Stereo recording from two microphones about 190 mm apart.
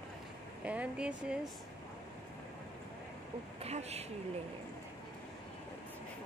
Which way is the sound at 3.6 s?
35° right (ahead or behind).